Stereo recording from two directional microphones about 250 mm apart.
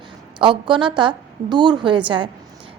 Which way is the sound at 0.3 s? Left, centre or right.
Centre.